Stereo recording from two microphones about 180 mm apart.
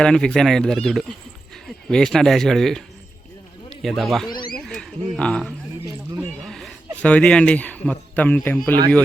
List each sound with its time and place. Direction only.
0.0 s speech: 5° left (ahead or behind)
3.8 s speech: centre (ahead or behind)
4.3 s speech: 25° left (ahead or behind)
4.5 s a man's voice: centre (ahead or behind)